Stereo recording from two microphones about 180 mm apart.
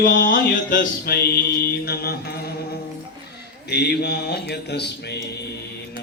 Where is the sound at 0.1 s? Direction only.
70° left (ahead or behind).